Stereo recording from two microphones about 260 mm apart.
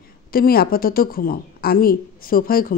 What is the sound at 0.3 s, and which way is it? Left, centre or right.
A woman's voice, left.